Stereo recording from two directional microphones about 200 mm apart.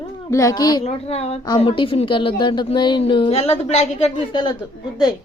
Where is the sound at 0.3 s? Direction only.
15° left (ahead or behind).